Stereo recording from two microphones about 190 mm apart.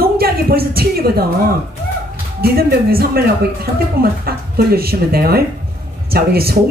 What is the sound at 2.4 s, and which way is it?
A woman's voice, 55° right (ahead or behind).